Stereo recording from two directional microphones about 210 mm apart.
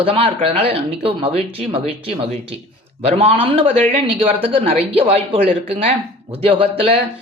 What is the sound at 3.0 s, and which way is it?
Speech, 30° right (ahead or behind).